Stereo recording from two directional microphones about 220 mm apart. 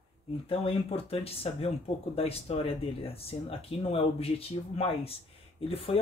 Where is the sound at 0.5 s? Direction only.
25° left (ahead or behind).